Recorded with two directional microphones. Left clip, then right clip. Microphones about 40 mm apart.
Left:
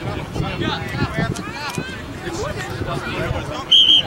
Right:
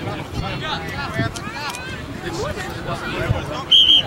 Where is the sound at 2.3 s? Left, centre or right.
Centre.